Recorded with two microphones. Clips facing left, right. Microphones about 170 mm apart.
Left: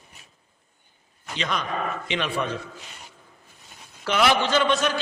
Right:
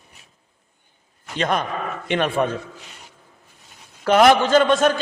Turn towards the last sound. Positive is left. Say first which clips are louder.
# right 6 dB
turn(degrees=-50)  # may be behind; listen again after turning